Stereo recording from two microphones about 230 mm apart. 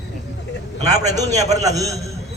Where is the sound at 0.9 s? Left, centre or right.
Right.